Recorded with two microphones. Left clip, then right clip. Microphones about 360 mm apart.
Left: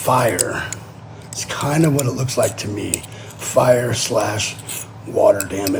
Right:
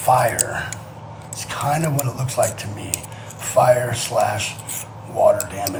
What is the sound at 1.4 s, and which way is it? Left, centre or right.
A man's voice, centre.